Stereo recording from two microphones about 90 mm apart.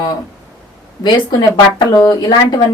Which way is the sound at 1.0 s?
55° left (ahead or behind).